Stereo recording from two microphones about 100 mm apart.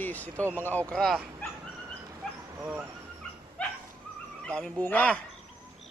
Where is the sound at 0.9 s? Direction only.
Centre (ahead or behind).